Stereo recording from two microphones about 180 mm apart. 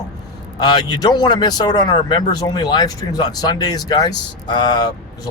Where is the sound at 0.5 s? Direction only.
25° left (ahead or behind).